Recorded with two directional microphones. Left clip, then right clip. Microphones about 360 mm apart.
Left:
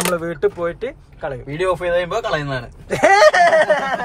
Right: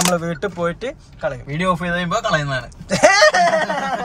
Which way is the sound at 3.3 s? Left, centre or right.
Left.